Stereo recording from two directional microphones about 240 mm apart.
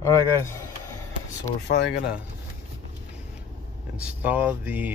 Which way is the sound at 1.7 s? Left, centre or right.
Left.